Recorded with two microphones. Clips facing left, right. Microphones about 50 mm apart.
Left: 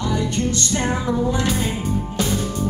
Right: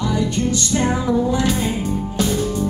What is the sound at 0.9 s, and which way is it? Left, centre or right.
Music, centre.